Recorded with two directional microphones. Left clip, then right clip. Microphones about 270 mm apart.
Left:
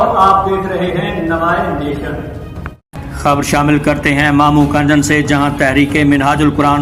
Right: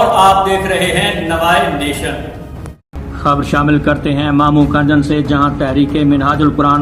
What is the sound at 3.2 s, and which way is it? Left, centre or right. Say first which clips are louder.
A man's voice: left 1 dB; left.